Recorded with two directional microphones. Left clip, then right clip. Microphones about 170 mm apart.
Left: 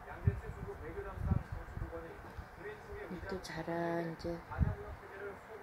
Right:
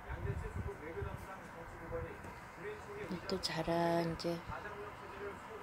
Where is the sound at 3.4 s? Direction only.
20° right (ahead or behind).